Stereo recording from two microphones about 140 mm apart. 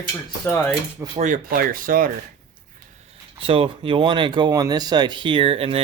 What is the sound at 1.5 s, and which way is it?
Speech, 90° right.